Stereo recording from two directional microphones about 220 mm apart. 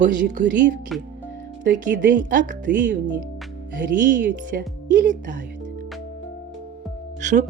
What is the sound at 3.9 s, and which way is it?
Speech, 35° right (ahead or behind).